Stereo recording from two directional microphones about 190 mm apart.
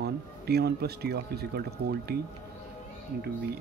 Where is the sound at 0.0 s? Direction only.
60° right (ahead or behind).